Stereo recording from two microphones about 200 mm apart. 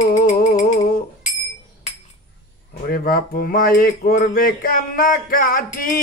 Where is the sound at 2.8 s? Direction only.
45° left (ahead or behind).